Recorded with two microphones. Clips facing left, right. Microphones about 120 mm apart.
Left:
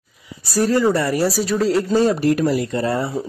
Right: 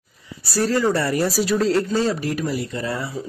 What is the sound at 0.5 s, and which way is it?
Speech, 15° left (ahead or behind).